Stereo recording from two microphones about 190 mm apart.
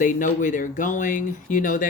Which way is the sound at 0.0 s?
45° left (ahead or behind).